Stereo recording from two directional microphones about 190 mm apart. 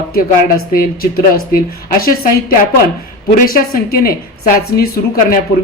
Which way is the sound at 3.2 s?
50° left (ahead or behind).